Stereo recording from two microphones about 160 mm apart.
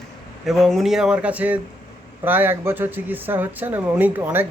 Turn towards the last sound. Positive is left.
turn(degrees=-10)  # may be behind; listen again after turning